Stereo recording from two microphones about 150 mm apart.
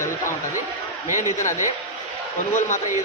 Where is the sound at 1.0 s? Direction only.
20° right (ahead or behind).